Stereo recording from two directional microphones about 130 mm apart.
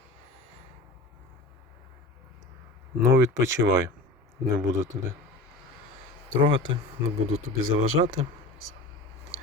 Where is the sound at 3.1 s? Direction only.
25° right (ahead or behind).